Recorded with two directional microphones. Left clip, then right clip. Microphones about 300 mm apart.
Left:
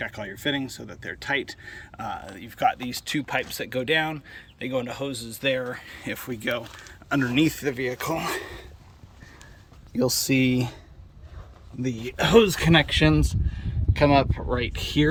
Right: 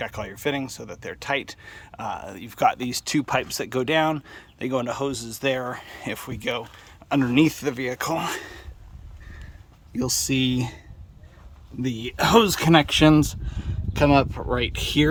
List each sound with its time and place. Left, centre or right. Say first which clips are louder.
0.0 s speech: right 1 dB; centre
10.3 s speech: left 1 dB; right
11.8 s speech: right 2 dB; centre